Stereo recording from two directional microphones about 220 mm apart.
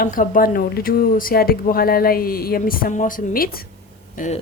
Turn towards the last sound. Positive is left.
turn(degrees=35)  # may be behind; listen again after turning